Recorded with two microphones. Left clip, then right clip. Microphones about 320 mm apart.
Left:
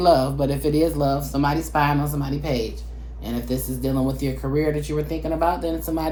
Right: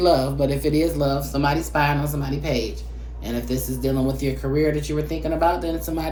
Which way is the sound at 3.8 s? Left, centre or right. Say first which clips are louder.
Right 1 dB; centre.